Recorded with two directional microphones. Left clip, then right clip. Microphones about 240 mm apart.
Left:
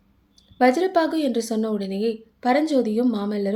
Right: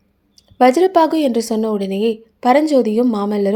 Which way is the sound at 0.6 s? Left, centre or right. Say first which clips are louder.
Right 7 dB; right.